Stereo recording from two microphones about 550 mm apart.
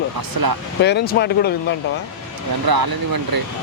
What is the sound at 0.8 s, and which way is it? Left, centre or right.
Speech, centre.